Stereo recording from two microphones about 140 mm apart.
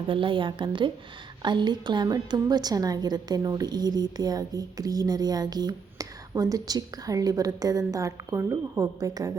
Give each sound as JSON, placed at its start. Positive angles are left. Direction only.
{"t": 0.1, "sound": "a woman's voice", "side_deg": -35}